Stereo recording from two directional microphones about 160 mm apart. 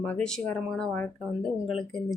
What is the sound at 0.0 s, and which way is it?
Speech, 5° left (ahead or behind).